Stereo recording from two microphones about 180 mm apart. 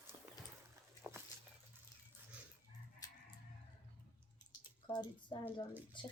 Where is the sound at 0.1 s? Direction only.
30° right (ahead or behind).